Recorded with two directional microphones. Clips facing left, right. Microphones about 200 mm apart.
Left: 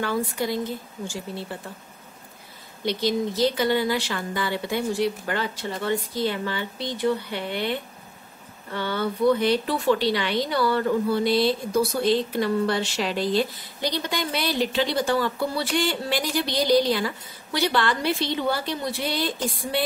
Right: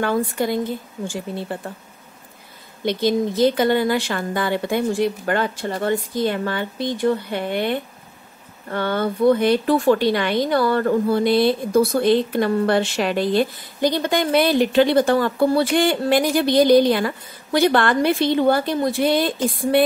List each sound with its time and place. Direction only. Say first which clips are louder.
0.0 s speech: right 5 dB; 55° right (ahead or behind)
2.8 s speech: right 5 dB; 55° right (ahead or behind)